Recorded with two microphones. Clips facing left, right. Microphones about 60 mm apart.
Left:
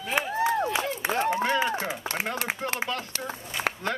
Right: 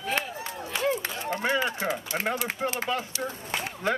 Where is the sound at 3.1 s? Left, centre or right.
Left.